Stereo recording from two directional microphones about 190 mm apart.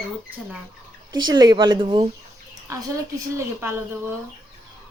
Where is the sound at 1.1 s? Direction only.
20° right (ahead or behind).